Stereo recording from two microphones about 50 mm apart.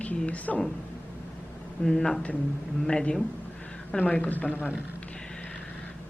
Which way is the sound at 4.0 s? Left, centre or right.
Left.